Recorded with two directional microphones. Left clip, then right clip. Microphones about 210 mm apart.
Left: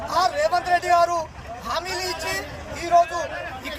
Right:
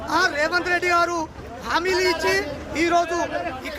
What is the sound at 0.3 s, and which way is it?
Speech, 25° right (ahead or behind).